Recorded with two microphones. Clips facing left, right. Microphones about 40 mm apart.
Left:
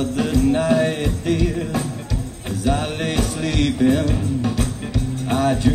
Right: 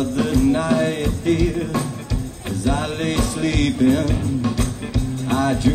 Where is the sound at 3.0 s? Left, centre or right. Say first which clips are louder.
Right 1 dB; centre.